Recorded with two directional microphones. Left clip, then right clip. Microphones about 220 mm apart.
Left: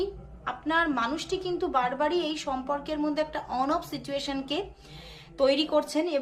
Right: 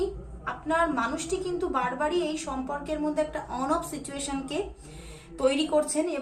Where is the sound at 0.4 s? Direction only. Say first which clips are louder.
Even; 45° left (ahead or behind).